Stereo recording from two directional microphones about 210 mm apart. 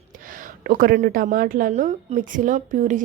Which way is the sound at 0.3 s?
40° right (ahead or behind).